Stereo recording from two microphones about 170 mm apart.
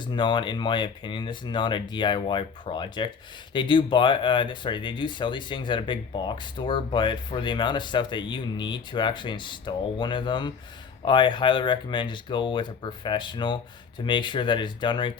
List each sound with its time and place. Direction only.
0.0 s speech: 25° left (ahead or behind)